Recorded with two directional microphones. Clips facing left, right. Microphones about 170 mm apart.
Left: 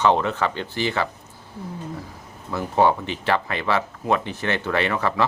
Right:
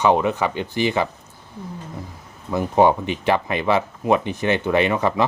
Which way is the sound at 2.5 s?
15° right (ahead or behind).